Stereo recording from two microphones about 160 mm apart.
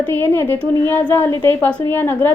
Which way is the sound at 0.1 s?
15° left (ahead or behind).